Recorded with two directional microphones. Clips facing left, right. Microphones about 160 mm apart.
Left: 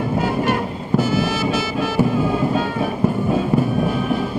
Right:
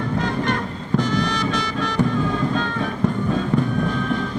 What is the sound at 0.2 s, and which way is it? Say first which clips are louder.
Music: left 4 dB; 10° left (ahead or behind).